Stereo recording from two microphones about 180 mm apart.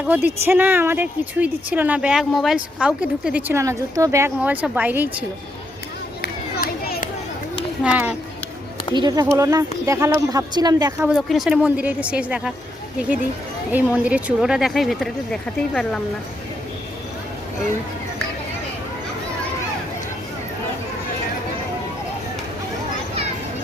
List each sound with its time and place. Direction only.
0.0 s speech: 10° right (ahead or behind)
6.2 s a sound: 55° left (ahead or behind)
7.9 s speech: 10° right (ahead or behind)
9.0 s speech: 20° right (ahead or behind)
11.0 s speech: 5° right (ahead or behind)